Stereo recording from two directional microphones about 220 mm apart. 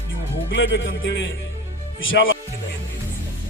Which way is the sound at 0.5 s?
55° left (ahead or behind).